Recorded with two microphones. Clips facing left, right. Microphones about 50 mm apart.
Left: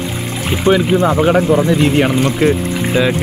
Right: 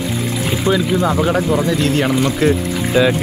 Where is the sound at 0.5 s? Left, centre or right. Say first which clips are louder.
Left 5 dB; left.